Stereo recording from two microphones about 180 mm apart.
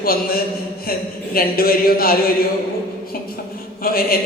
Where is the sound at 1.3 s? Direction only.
55° left (ahead or behind).